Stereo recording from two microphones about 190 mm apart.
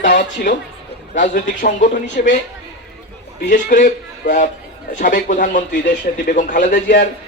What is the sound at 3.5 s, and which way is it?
A man's voice, 45° left (ahead or behind).